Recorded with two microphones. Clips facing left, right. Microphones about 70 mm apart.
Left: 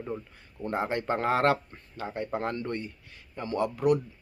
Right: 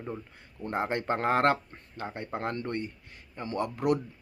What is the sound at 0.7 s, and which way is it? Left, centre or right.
Speech, right.